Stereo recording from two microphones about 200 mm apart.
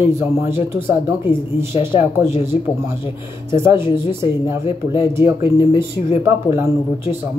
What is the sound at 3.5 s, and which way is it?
Speech, 15° right (ahead or behind).